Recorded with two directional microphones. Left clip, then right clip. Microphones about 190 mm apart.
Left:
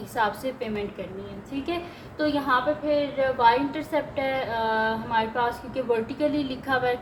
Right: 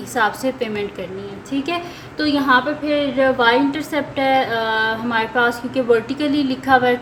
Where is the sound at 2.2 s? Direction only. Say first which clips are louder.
Right 7 dB; 30° right (ahead or behind).